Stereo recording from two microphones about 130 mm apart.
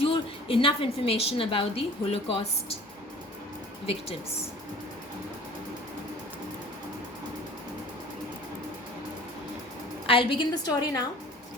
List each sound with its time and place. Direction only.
0.0 s a woman's voice: 45° left (ahead or behind)
10.1 s a woman's voice: 40° left (ahead or behind)